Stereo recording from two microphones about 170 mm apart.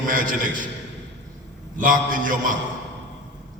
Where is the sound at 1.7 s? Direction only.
50° right (ahead or behind).